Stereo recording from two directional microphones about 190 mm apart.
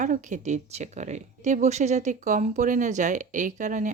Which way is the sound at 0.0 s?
40° right (ahead or behind).